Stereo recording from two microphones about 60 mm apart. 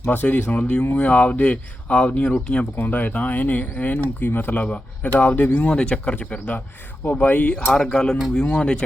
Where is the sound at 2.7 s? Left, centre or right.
Left.